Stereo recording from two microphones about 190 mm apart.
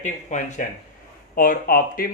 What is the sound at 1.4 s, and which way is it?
Speech, 50° left (ahead or behind).